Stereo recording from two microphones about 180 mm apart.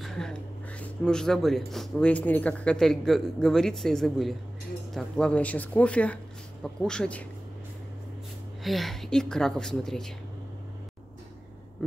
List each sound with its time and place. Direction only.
0.0 s speech: 5° left (ahead or behind)
8.6 s speech: centre (ahead or behind)